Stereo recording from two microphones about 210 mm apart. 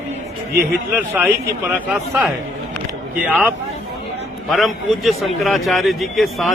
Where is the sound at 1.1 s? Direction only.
10° right (ahead or behind).